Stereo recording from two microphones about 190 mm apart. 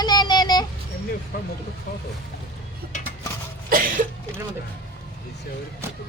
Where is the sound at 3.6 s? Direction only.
50° right (ahead or behind).